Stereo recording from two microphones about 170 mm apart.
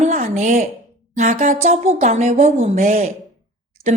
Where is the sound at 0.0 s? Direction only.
45° right (ahead or behind).